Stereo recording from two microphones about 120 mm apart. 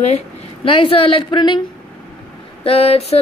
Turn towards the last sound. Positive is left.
turn(degrees=60)  # may be behind; listen again after turning